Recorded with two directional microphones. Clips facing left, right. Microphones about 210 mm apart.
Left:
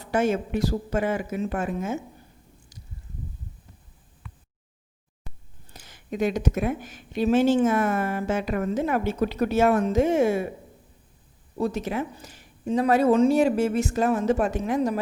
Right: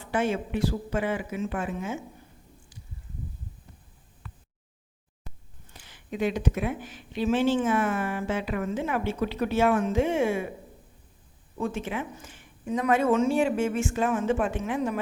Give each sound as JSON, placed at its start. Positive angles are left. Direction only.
{"t": 0.0, "sound": "speech", "side_deg": 40}
{"t": 5.7, "sound": "speech", "side_deg": 45}
{"t": 11.5, "sound": "a woman's voice", "side_deg": 40}